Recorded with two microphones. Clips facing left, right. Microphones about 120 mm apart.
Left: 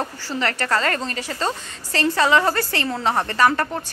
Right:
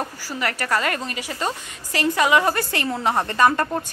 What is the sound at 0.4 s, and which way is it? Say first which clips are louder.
A woman's voice: left 1 dB; 10° right (ahead or behind).